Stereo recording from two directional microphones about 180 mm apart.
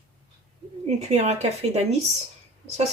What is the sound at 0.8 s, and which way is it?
Speech, 40° right (ahead or behind).